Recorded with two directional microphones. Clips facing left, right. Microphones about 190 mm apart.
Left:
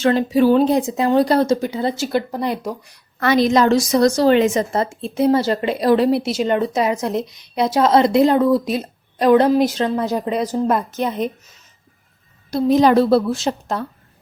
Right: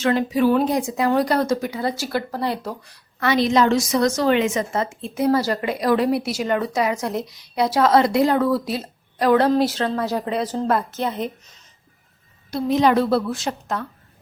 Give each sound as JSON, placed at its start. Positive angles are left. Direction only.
{"t": 0.0, "sound": "a woman's voice", "side_deg": 30}
{"t": 3.2, "sound": "a woman's voice", "side_deg": 45}
{"t": 12.5, "sound": "a woman's voice", "side_deg": 40}